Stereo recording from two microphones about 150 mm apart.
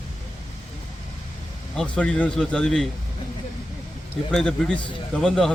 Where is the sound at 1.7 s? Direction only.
5° left (ahead or behind).